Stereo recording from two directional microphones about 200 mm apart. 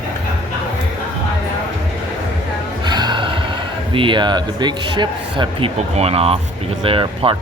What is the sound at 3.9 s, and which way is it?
Speech, 25° right (ahead or behind).